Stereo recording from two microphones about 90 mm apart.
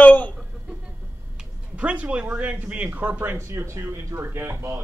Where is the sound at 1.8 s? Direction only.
15° right (ahead or behind); by 4.8 s 30° right (ahead or behind).